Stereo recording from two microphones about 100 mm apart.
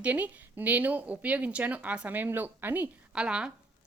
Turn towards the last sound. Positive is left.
turn(degrees=-10)  # may be behind; listen again after turning